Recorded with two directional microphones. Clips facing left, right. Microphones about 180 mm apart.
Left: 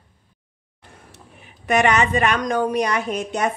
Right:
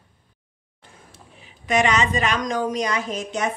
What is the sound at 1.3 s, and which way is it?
A woman's voice, 60° left (ahead or behind).